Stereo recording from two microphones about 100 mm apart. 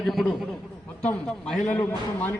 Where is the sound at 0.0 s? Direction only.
Centre (ahead or behind).